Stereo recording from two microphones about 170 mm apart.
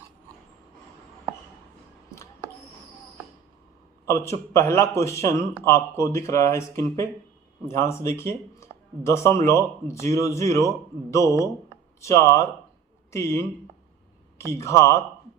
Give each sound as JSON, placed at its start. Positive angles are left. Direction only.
{"t": 4.0, "sound": "speech", "side_deg": 15}